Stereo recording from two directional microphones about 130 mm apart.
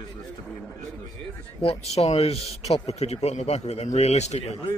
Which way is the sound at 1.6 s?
50° left (ahead or behind).